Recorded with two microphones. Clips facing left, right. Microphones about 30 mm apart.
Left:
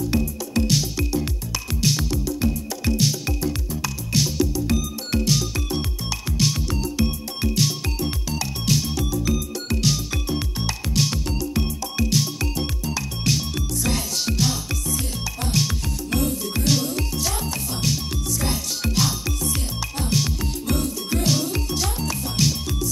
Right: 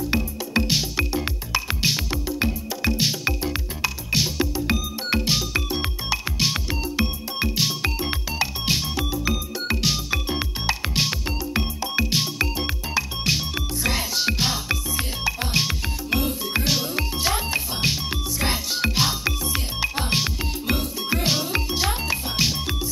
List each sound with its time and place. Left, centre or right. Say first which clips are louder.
0.1 s music: even; right